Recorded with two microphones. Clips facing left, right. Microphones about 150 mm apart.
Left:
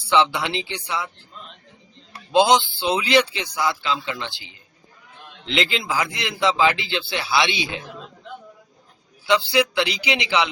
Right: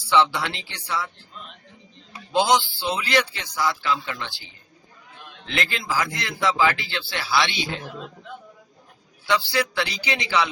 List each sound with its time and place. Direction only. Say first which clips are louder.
0.1 s speech: left 1 dB; 15° left (ahead or behind)
2.3 s speech: left 3 dB; 20° left (ahead or behind)
9.2 s speech: left 4 dB; 20° left (ahead or behind)